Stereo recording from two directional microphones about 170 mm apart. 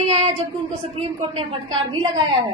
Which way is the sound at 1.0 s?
35° right (ahead or behind).